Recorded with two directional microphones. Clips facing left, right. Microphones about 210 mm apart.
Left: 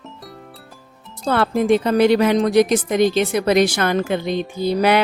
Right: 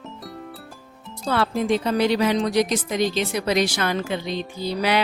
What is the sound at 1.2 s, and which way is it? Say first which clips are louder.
Speech: left 4 dB; 50° left (ahead or behind).